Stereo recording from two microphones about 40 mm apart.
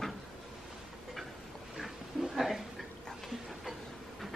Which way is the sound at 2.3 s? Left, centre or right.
Centre.